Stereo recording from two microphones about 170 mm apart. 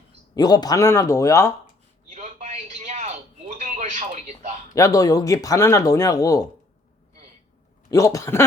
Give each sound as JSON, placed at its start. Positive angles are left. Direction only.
{"t": 0.3, "sound": "speech", "side_deg": 25}
{"t": 2.1, "sound": "a sound", "side_deg": -40}
{"t": 4.7, "sound": "speech", "side_deg": 20}
{"t": 7.9, "sound": "speech", "side_deg": 20}